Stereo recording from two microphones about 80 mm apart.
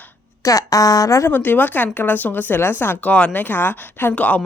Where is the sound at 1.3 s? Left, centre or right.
Left.